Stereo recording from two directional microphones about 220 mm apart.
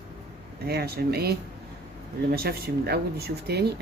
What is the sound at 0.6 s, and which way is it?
A woman's voice, 45° right (ahead or behind).